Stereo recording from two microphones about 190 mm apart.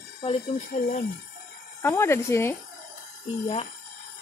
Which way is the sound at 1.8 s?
15° left (ahead or behind).